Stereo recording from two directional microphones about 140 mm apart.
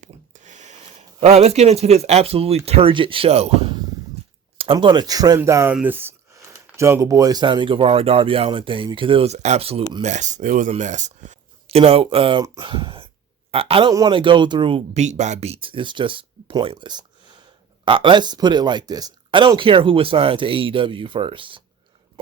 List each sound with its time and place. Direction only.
0.0 s a sound: 60° right (ahead or behind); by 2.6 s 45° right (ahead or behind)
2.6 s speech: 45° right (ahead or behind)
10.0 s speech: 60° right (ahead or behind)
11.8 s speech: 40° right (ahead or behind)